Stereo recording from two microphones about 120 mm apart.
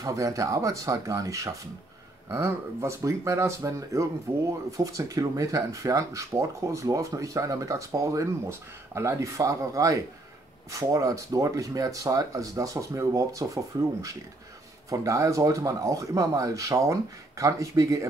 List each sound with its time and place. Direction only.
0.0 s speech: 30° right (ahead or behind)